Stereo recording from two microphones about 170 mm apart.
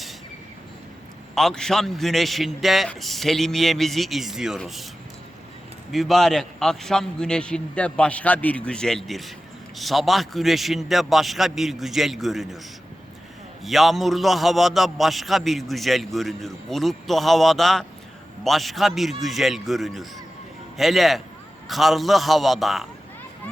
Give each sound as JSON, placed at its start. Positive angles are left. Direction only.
{"t": 1.4, "sound": "a man's voice", "side_deg": 5}
{"t": 5.9, "sound": "a man's voice", "side_deg": 0}
{"t": 13.7, "sound": "a man's voice", "side_deg": 0}